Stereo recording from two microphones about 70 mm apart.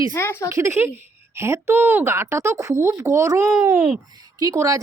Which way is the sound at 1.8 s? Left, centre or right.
Right.